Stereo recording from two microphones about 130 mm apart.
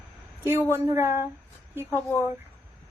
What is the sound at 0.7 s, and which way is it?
Speech, 20° right (ahead or behind).